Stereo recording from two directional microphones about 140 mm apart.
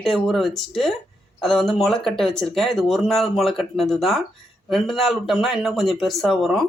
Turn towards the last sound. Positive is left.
turn(degrees=0)  # may be behind; listen again after turning